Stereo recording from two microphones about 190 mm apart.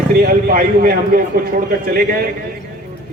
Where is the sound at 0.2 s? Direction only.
50° right (ahead or behind).